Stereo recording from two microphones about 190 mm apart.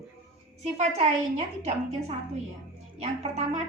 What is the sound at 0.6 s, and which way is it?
A woman's voice, 35° right (ahead or behind).